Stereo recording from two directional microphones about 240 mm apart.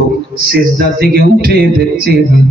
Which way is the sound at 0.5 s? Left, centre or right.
Right.